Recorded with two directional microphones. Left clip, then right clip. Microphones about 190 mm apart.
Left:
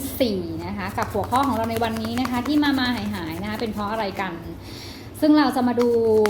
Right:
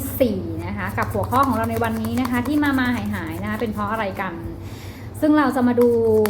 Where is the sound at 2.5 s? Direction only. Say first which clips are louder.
Even; 35° left (ahead or behind).